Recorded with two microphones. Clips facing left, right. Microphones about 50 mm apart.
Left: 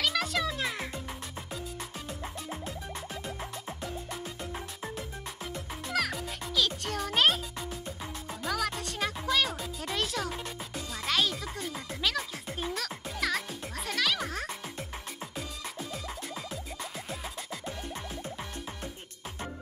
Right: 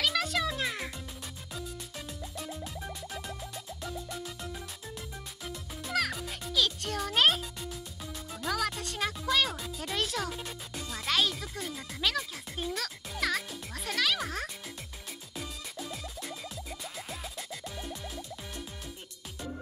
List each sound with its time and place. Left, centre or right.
0.0 s music: centre
2.2 s music: left
3.6 s music: left
5.9 s music: centre
8.5 s speech: centre
11.1 s music: centre
12.0 s speech: centre
12.7 s music: centre
17.6 s music: left